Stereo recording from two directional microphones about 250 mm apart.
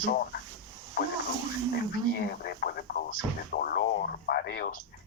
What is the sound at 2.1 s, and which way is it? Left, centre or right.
Speech, left.